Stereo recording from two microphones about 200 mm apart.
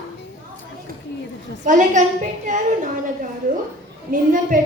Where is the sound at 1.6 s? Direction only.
40° right (ahead or behind).